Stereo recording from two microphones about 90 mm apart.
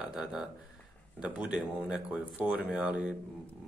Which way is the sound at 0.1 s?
5° right (ahead or behind).